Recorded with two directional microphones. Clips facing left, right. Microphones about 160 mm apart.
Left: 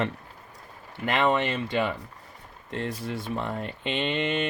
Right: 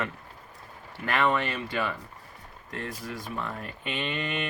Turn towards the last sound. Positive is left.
turn(degrees=25)  # may be behind; listen again after turning